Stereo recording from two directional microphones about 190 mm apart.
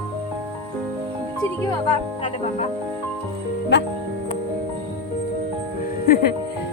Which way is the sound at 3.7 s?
65° left (ahead or behind).